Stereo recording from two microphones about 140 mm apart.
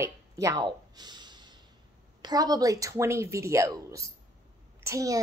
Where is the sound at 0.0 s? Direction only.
25° right (ahead or behind).